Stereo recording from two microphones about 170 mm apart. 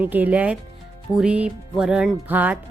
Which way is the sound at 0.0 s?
10° right (ahead or behind).